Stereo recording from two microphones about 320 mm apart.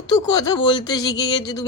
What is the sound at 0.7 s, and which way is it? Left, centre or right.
Speech, centre.